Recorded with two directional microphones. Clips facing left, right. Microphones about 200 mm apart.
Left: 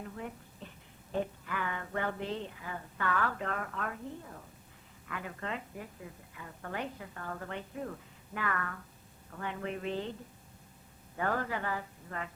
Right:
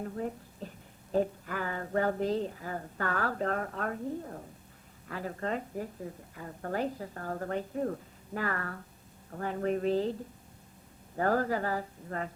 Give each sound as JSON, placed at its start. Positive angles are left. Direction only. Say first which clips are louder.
{"t": 0.0, "sound": "a woman's voice", "louder": "right 7 dB", "side_deg": -40}
{"t": 11.2, "sound": "a woman's voice", "louder": "right 5 dB", "side_deg": -40}